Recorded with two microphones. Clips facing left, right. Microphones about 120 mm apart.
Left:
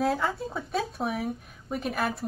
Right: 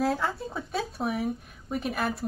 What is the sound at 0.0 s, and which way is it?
Speech, centre (ahead or behind).